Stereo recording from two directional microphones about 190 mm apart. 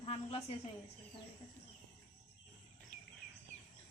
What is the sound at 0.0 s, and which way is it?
Speech, 35° left (ahead or behind).